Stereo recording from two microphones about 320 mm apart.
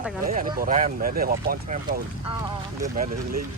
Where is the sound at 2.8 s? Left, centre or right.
Right.